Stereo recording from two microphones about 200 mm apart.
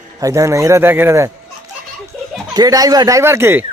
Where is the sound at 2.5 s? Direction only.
20° right (ahead or behind).